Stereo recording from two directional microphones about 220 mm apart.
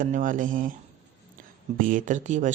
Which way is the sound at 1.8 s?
35° right (ahead or behind).